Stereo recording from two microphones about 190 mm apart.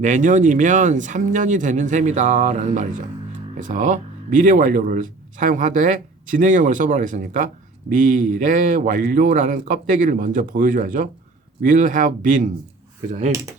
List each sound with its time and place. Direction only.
0.0 s speech: 40° right (ahead or behind)